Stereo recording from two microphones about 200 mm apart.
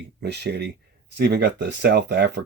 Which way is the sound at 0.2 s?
55° right (ahead or behind).